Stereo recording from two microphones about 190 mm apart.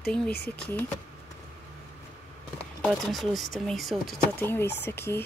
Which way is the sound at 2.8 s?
Centre (ahead or behind).